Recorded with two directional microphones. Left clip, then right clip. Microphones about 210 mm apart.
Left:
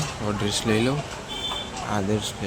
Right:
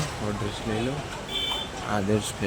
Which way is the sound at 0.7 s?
25° left (ahead or behind).